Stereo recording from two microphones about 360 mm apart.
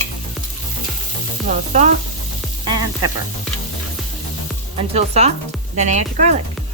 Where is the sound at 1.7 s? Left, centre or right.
Centre.